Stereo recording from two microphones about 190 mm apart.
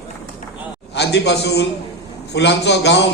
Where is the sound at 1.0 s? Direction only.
65° left (ahead or behind).